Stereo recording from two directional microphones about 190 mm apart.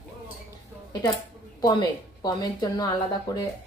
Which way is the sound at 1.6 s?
20° left (ahead or behind).